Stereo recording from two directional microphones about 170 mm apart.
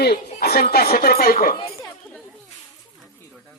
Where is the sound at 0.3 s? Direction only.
65° left (ahead or behind).